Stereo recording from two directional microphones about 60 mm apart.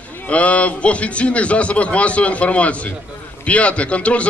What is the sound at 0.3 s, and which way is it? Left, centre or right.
A man's voice, left.